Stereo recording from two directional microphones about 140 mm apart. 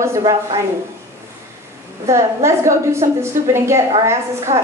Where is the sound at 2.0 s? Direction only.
20° right (ahead or behind).